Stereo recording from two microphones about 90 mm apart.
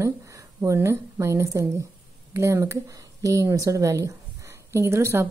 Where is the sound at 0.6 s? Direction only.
30° right (ahead or behind).